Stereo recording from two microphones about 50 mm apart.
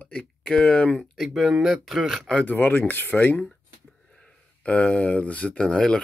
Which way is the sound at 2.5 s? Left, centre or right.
Left.